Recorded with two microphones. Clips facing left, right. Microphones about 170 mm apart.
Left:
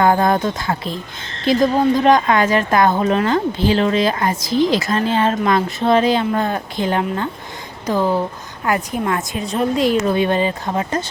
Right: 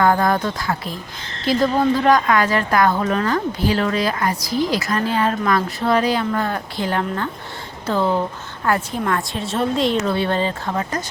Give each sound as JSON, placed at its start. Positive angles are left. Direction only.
{"t": 0.0, "sound": "a woman's voice", "side_deg": 20}
{"t": 9.4, "sound": "a woman's voice", "side_deg": 0}
{"t": 10.1, "sound": "speech", "side_deg": 15}